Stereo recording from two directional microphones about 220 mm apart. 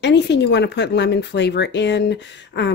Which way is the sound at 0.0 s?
50° left (ahead or behind).